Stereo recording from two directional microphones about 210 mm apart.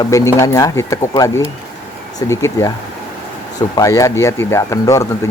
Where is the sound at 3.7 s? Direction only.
15° left (ahead or behind).